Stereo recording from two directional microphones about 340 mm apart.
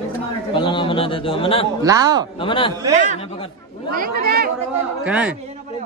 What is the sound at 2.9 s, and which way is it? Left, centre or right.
Speech, right.